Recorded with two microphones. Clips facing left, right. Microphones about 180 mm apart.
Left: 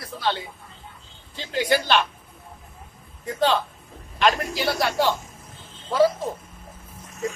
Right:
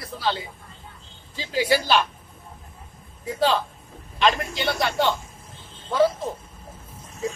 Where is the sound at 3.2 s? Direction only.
Centre (ahead or behind).